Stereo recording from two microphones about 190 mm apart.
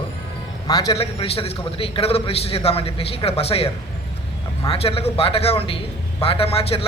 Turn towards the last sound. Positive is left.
turn(degrees=30)  # may be behind; listen again after turning